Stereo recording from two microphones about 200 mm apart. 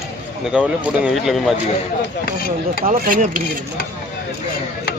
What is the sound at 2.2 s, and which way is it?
Speech, 45° left (ahead or behind).